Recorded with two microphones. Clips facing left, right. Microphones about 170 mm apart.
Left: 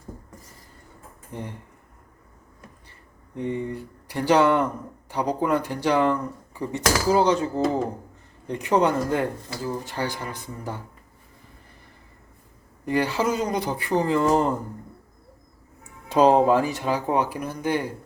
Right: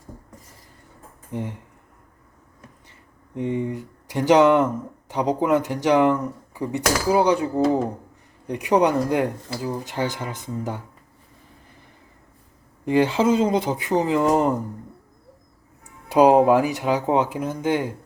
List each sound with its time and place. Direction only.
1.3 s speech: 15° right (ahead or behind)
3.3 s speech: 15° right (ahead or behind)
12.8 s speech: 20° right (ahead or behind)
16.0 s speech: 15° right (ahead or behind)